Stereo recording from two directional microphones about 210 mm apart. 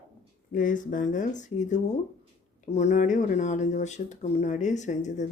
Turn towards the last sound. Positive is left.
turn(degrees=35)  # may be behind; listen again after turning